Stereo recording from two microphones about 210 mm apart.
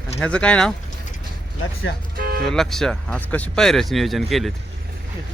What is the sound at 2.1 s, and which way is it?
Music, 45° right (ahead or behind).